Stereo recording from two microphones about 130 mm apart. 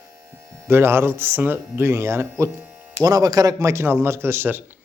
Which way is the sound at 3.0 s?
30° right (ahead or behind).